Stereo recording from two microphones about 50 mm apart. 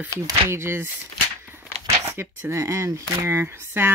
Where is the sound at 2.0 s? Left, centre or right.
Right.